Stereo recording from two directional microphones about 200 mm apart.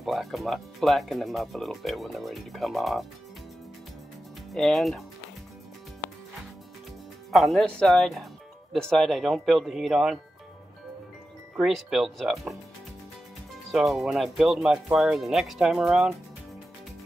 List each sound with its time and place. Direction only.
0.0 s speech: centre (ahead or behind)
4.5 s speech: centre (ahead or behind)
7.2 s speech: centre (ahead or behind)
11.5 s speech: centre (ahead or behind)
13.7 s speech: centre (ahead or behind)